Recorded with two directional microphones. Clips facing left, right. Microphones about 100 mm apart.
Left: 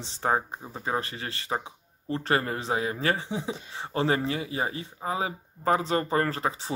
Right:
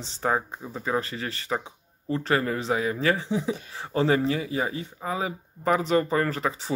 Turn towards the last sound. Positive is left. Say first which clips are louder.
# right 1 dB
turn(degrees=30)  # may be behind; listen again after turning